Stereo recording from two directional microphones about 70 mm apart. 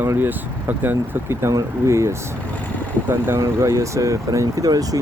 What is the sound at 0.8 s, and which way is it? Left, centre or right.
Speech, right.